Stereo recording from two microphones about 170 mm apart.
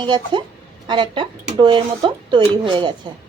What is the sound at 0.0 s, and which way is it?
Speech, 25° right (ahead or behind).